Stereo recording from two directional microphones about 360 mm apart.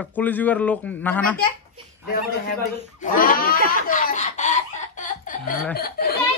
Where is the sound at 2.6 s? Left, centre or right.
Left.